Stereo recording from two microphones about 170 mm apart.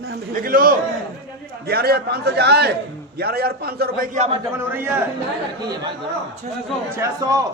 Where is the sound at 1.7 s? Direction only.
65° right (ahead or behind).